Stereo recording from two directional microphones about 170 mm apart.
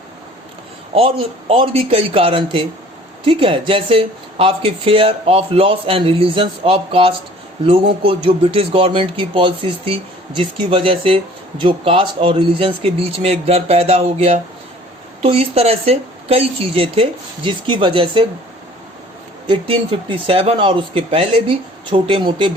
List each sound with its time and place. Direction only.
0.9 s speech: 35° right (ahead or behind)
19.5 s speech: 30° right (ahead or behind)